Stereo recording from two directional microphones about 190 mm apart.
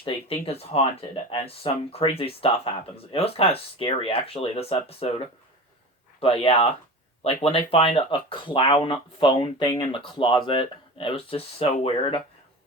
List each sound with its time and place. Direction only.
0.0 s speech: 30° left (ahead or behind)